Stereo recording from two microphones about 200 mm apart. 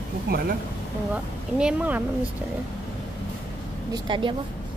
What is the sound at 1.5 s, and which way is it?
Speech, 5° right (ahead or behind).